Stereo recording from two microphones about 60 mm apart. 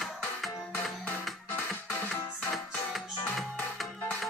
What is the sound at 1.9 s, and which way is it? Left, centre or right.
Music, left.